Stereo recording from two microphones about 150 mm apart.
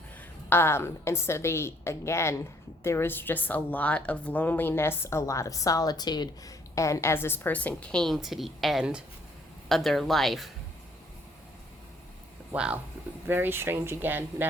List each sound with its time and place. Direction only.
0.2 s a woman's voice: 15° left (ahead or behind)
12.5 s speech: 5° right (ahead or behind)